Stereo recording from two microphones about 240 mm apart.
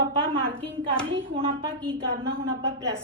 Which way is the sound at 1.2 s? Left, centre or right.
Right.